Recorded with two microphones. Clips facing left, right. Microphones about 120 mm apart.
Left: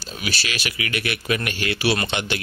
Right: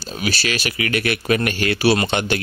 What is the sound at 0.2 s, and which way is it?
A man's voice, 40° right (ahead or behind).